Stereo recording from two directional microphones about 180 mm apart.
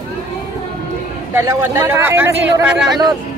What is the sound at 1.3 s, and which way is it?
Speech, 15° right (ahead or behind).